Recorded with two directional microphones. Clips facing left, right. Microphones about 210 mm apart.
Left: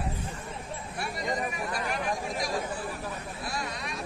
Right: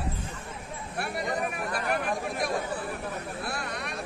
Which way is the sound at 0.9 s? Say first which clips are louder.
Right 2 dB; 60° right (ahead or behind).